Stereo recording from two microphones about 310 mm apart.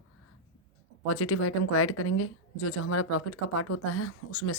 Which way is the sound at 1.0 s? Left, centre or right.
Left.